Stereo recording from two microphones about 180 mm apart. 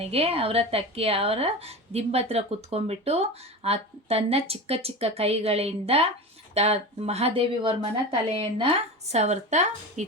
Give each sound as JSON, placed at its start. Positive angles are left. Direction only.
{"t": 0.0, "sound": "speech", "side_deg": -35}